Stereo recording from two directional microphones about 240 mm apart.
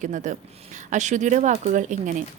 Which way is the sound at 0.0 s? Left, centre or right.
Right.